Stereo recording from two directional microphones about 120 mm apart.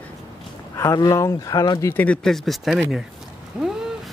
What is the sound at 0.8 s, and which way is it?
Speech, 25° left (ahead or behind).